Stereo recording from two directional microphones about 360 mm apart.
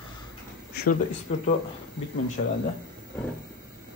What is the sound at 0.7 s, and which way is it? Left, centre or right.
Speech, left.